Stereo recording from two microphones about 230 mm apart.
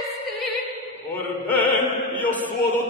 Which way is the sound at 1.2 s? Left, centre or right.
Centre.